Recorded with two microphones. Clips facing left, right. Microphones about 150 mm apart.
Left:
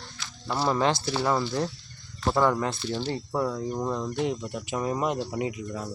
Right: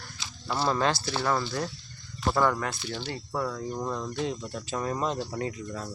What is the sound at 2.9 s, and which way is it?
Speech, 25° left (ahead or behind).